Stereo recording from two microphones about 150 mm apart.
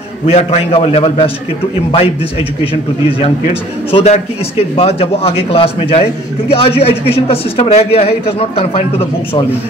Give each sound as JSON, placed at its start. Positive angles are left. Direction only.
{"t": 0.3, "sound": "a man's voice", "side_deg": 45}